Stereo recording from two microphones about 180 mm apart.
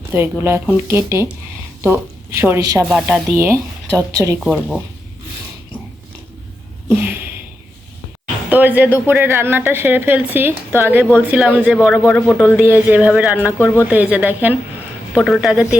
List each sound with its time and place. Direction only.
0.1 s a woman's voice: 10° right (ahead or behind)
2.8 s speech: centre (ahead or behind)
3.3 s a woman's voice: 15° right (ahead or behind)
4.4 s speech: 5° right (ahead or behind)
6.8 s a sound: 10° right (ahead or behind)
8.4 s a woman's voice: 10° right (ahead or behind)
12.0 s speech: 5° left (ahead or behind)
12.5 s a woman's voice: 10° right (ahead or behind)